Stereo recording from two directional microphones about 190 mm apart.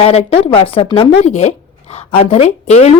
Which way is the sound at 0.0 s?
30° left (ahead or behind).